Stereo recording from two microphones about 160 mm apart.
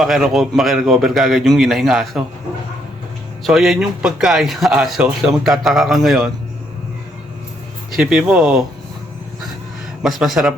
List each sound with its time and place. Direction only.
0.0 s speech: centre (ahead or behind)
3.4 s speech: centre (ahead or behind)
7.9 s speech: 5° right (ahead or behind)
10.0 s speech: centre (ahead or behind)